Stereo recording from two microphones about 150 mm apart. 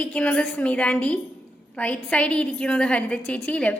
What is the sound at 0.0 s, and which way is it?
A woman's voice, 10° left (ahead or behind).